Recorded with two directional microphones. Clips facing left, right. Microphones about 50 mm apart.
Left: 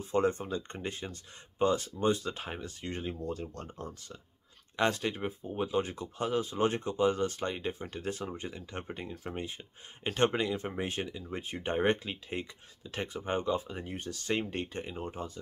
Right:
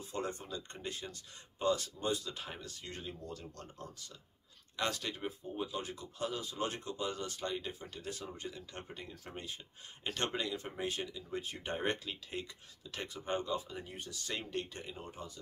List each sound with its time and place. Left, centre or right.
0.0 s speech: left